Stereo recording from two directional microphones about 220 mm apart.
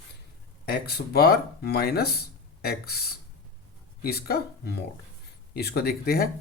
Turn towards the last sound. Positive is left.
turn(degrees=45)  # may be behind; listen again after turning